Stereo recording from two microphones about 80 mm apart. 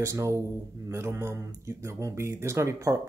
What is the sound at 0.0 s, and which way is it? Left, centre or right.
Speech, right.